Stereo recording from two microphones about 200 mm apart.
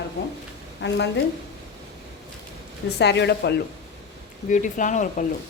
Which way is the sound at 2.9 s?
60° left (ahead or behind).